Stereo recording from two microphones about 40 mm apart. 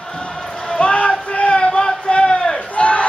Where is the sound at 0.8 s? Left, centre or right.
Left.